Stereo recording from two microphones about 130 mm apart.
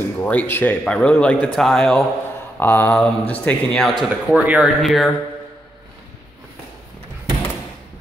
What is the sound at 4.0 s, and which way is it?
Speech, 5° right (ahead or behind).